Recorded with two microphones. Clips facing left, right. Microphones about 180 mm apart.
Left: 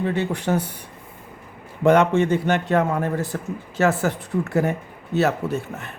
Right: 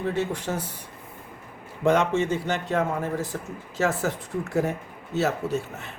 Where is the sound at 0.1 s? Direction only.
65° left (ahead or behind).